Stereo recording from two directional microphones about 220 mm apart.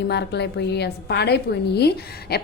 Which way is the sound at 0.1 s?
50° left (ahead or behind).